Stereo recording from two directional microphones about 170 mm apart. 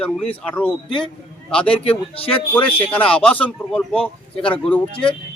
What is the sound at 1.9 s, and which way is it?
Speech, 35° left (ahead or behind).